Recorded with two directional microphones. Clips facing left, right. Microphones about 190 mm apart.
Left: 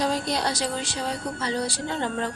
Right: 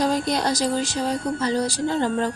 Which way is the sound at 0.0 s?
45° right (ahead or behind).